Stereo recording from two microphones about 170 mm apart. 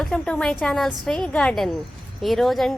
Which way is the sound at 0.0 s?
5° left (ahead or behind).